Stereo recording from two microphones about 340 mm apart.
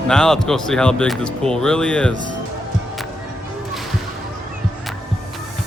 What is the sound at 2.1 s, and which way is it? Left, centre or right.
Speech, right.